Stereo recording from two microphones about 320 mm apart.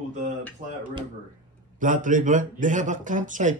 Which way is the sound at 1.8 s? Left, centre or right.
Right.